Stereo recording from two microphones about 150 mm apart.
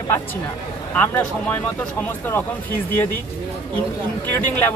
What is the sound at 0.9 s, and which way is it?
Speech, 10° left (ahead or behind).